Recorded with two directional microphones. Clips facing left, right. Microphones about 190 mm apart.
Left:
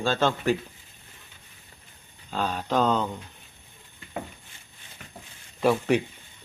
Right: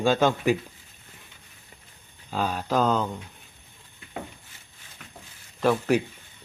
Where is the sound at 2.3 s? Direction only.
5° right (ahead or behind).